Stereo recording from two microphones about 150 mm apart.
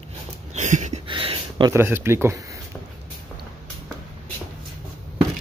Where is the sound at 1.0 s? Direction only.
35° right (ahead or behind).